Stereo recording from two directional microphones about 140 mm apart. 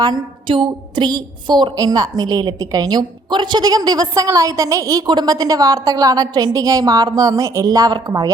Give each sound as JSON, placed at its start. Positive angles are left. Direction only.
{"t": 0.0, "sound": "a woman's voice", "side_deg": -35}